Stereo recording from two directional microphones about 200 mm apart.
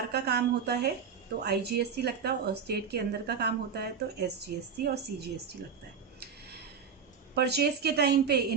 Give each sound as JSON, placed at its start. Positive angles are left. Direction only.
{"t": 0.1, "sound": "speech", "side_deg": -55}
{"t": 7.3, "sound": "speech", "side_deg": -55}